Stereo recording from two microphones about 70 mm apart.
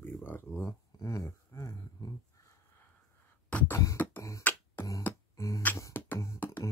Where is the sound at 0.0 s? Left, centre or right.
Left.